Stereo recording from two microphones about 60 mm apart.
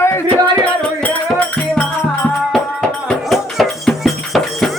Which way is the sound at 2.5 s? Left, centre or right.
Centre.